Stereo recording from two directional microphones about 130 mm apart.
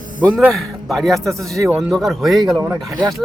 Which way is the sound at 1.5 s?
25° right (ahead or behind).